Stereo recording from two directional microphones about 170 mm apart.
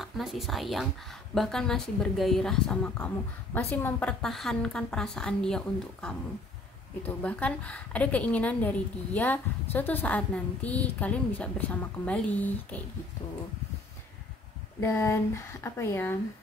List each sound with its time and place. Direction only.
0.0 s a woman's voice: centre (ahead or behind)
7.0 s a woman's voice: 10° left (ahead or behind)
14.8 s a woman's voice: 15° left (ahead or behind)